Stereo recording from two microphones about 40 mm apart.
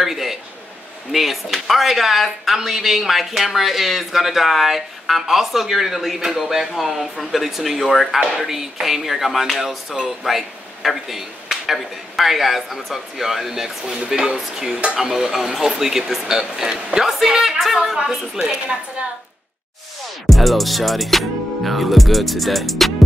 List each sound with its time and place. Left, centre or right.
0.0 s a sound: centre
1.1 s speech: centre
8.4 s a woman's voice: centre
20.2 s music: centre